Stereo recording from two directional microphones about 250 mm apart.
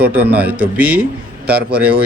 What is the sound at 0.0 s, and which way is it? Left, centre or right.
Speech, centre.